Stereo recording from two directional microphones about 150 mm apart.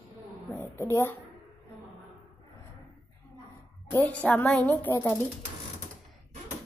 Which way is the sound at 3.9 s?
10° left (ahead or behind).